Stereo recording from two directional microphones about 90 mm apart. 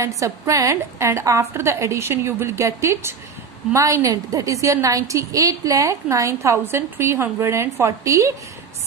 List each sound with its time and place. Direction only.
0.0 s a woman's voice: 35° right (ahead or behind)